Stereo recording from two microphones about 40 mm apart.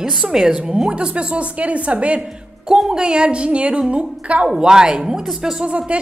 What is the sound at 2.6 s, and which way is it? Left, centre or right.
Speech, centre.